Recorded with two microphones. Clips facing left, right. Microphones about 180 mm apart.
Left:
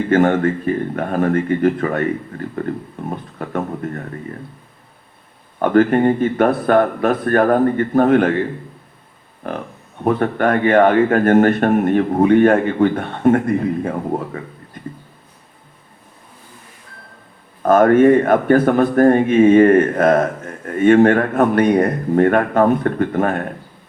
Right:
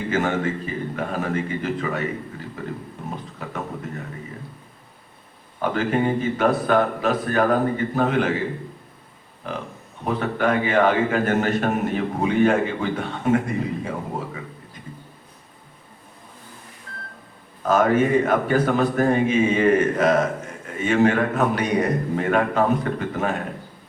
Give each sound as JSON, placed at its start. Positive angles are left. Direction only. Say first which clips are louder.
{"t": 0.1, "sound": "speech", "louder": "left 8 dB", "side_deg": 55}
{"t": 3.0, "sound": "music", "louder": "left 7 dB", "side_deg": 55}
{"t": 3.3, "sound": "a sound", "louder": "left 7 dB", "side_deg": 55}
{"t": 5.6, "sound": "speech", "louder": "left 8 dB", "side_deg": 55}
{"t": 9.5, "sound": "speech", "louder": "left 5 dB", "side_deg": 55}
{"t": 17.6, "sound": "speech", "louder": "left 7 dB", "side_deg": 55}